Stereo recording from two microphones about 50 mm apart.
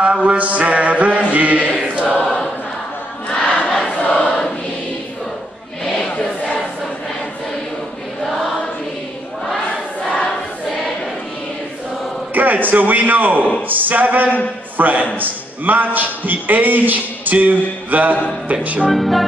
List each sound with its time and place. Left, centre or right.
0.0 s mantra: right
1.8 s choir: right
2.2 s choir: centre
3.3 s battle cry: centre
4.0 s choir: left
12.4 s a man's voice: right
18.9 s music: centre